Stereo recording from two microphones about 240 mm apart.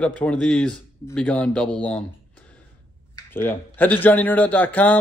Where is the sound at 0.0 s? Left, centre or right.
Centre.